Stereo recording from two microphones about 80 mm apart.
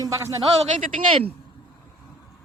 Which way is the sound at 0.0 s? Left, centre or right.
Right.